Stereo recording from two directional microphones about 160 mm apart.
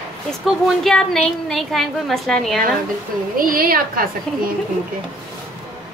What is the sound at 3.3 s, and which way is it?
Speech, 65° right (ahead or behind).